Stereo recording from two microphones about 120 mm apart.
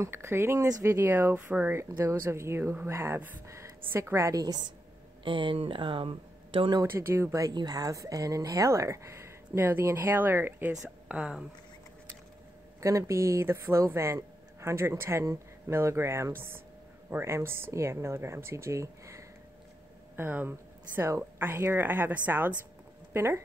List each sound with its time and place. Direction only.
0.0 s speech: 20° right (ahead or behind)
5.2 s speech: 45° right (ahead or behind)
6.8 s speech: 20° right (ahead or behind)
10.7 s a woman's voice: 5° right (ahead or behind)
12.8 s a woman's voice: 25° right (ahead or behind)